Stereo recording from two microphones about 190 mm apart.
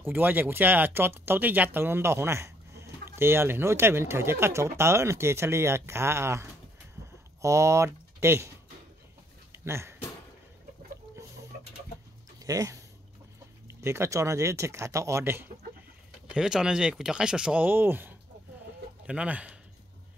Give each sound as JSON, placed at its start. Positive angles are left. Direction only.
{"t": 0.0, "sound": "speech", "side_deg": -10}
{"t": 9.5, "sound": "a sound", "side_deg": -15}
{"t": 12.4, "sound": "speech", "side_deg": -15}